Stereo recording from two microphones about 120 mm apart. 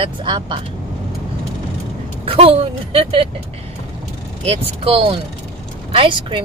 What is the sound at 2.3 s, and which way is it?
Speech, 50° right (ahead or behind).